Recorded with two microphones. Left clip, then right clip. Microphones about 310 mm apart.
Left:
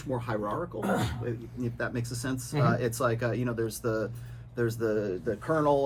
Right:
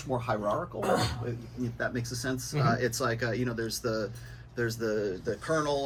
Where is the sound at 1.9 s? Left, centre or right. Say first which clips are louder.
Right 1 dB; left.